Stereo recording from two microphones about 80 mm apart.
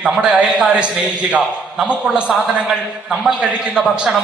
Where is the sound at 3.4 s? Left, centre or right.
Centre.